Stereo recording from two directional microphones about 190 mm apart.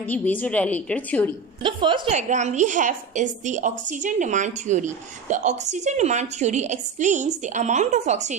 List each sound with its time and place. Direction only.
0.0 s a woman's voice: 10° left (ahead or behind)
1.6 s a woman's voice: 25° right (ahead or behind)
2.1 s a woman's voice: 40° right (ahead or behind)